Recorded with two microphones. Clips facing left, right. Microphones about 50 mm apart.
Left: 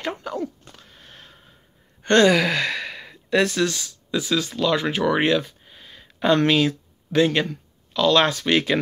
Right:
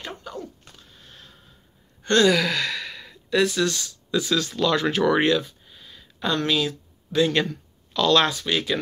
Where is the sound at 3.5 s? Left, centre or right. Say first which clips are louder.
Left 1 dB; left.